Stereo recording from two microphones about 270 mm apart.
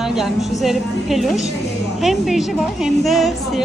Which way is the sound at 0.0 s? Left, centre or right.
Centre.